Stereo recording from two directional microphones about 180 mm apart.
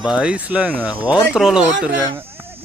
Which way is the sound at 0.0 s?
5° right (ahead or behind).